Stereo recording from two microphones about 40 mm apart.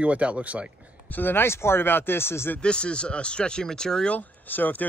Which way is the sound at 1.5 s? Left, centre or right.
Left.